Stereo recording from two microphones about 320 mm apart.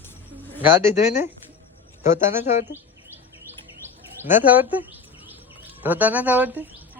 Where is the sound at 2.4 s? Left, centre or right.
Left.